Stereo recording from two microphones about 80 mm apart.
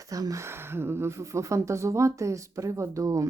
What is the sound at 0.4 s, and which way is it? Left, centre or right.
Speech, right.